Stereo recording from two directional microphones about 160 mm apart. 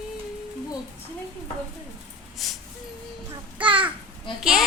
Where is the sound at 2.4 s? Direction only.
Centre (ahead or behind).